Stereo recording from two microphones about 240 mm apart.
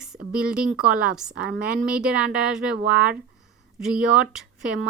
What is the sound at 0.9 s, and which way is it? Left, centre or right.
Speech, right.